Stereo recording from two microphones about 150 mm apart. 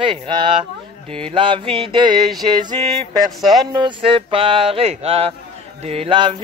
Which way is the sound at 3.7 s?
30° right (ahead or behind).